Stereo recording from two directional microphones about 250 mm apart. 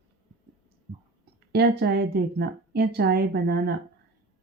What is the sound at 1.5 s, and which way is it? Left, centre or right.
A woman's voice, right.